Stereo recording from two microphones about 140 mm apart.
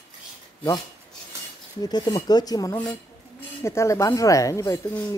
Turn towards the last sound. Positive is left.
turn(degrees=20)  # may be behind; listen again after turning